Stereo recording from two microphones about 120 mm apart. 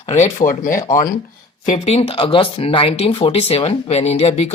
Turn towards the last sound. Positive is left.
turn(degrees=60)  # may be behind; listen again after turning